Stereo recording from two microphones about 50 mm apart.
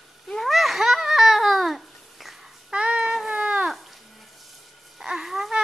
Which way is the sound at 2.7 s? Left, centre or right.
Centre.